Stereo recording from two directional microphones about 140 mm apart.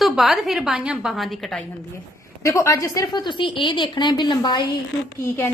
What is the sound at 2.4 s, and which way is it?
A woman's voice, 20° left (ahead or behind).